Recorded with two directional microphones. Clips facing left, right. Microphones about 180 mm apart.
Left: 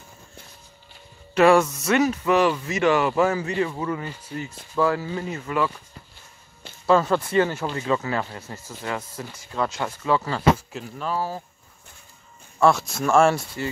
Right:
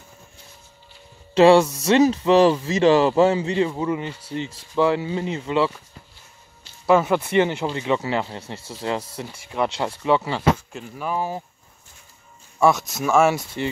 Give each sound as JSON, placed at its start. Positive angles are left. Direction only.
{"t": 1.3, "sound": "speech", "side_deg": -30}
{"t": 6.9, "sound": "speech", "side_deg": -10}
{"t": 12.5, "sound": "speech", "side_deg": -5}